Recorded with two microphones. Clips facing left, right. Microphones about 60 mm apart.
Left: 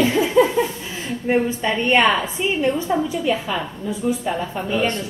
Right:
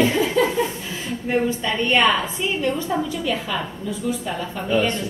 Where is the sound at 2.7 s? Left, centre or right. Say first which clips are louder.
Left 3 dB; centre.